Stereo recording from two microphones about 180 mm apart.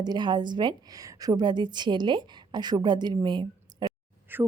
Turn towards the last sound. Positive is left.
turn(degrees=-10)  # may be behind; listen again after turning